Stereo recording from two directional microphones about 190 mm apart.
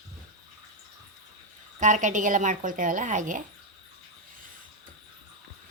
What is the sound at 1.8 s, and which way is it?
A woman's voice, 40° right (ahead or behind).